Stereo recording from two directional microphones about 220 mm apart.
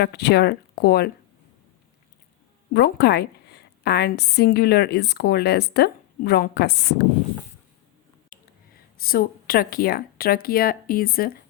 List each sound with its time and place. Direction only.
0.0 s a woman's voice: 50° left (ahead or behind)
2.7 s a woman's voice: 50° left (ahead or behind)
8.3 s a sound: 40° left (ahead or behind)
9.0 s a woman's voice: 45° left (ahead or behind)